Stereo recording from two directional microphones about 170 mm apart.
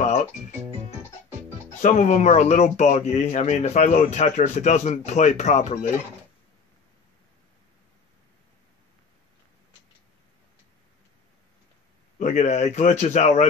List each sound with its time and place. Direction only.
0.0 s music: 40° left (ahead or behind)
1.8 s speech: 45° left (ahead or behind)
12.2 s speech: 45° left (ahead or behind)